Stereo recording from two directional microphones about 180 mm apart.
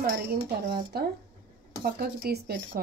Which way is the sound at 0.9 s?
60° right (ahead or behind).